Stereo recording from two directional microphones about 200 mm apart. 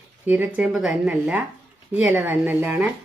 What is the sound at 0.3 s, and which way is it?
Speech, 5° right (ahead or behind).